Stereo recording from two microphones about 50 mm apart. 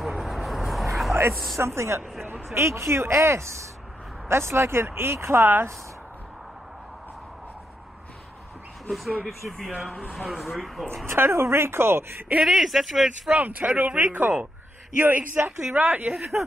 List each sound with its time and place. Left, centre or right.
0.0 s vehicle: centre
1.8 s speech: right
8.8 s speech: centre
11.1 s speech: right
12.4 s speech: centre
13.4 s speech: right